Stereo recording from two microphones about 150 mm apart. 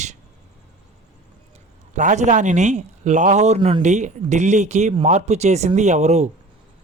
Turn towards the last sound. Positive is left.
turn(degrees=-50)  # may be behind; listen again after turning